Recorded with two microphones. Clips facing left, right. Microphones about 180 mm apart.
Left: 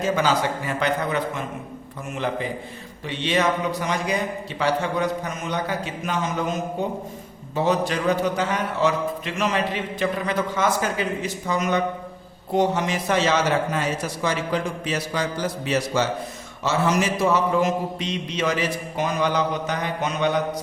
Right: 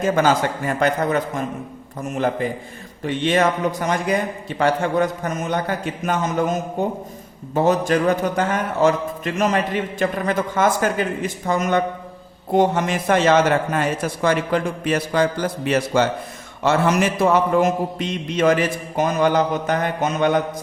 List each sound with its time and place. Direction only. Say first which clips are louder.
0.0 s a man's voice: right 4 dB; 50° right (ahead or behind)